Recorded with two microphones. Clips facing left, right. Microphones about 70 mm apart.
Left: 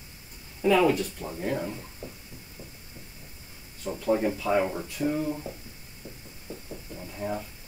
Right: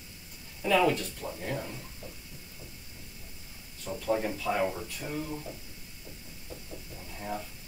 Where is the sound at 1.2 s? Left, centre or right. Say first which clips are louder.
Left 2 dB; left.